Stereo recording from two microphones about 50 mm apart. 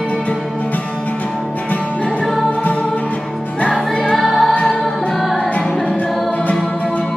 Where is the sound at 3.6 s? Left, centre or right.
Left.